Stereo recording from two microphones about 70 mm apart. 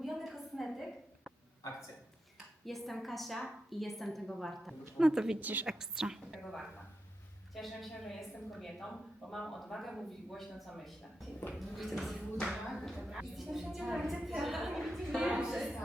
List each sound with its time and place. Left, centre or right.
0.0 s a sound: centre
2.6 s a woman's voice: centre
5.4 s a woman's voice: right
5.6 s a woman's voice: centre
6.3 s a woman's voice: centre